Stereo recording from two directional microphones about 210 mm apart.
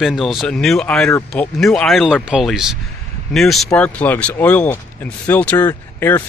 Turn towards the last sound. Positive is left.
turn(degrees=10)  # may be behind; listen again after turning